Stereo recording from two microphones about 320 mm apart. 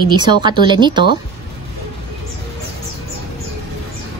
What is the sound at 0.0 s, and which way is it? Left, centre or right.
A woman's voice, centre.